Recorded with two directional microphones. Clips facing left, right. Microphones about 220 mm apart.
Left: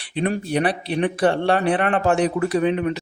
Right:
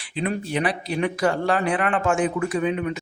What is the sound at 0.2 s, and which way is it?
Speech, 35° left (ahead or behind).